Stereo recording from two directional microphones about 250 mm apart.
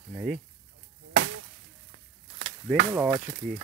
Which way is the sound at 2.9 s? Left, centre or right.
Centre.